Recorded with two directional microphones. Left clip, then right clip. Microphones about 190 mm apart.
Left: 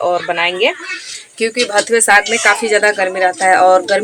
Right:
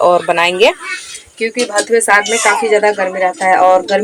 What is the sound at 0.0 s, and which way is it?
Speech, 35° right (ahead or behind).